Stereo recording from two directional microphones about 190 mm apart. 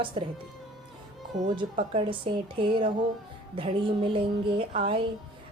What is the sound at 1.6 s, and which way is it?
A woman's voice, 25° right (ahead or behind).